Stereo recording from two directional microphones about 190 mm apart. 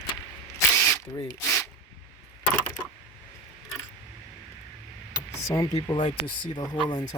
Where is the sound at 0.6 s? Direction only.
15° left (ahead or behind).